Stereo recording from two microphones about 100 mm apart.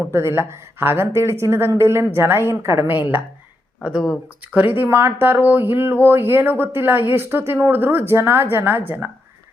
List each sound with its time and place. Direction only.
0.1 s speech: 25° right (ahead or behind)
3.8 s speech: 5° right (ahead or behind)
4.5 s speech: 20° right (ahead or behind)